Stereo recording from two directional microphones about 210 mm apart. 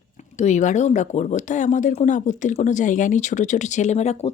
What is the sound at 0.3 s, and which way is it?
A woman's voice, 35° left (ahead or behind).